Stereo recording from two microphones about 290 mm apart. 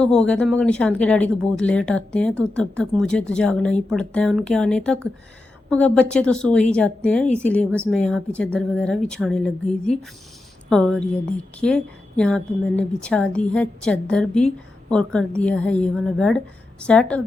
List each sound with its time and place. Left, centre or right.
0.0 s a woman's voice: centre